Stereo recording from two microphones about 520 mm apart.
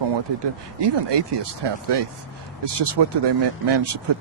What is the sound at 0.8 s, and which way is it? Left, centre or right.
Speech, right.